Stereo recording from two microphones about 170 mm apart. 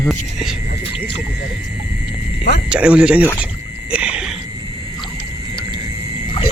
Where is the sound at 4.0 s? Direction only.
5° right (ahead or behind).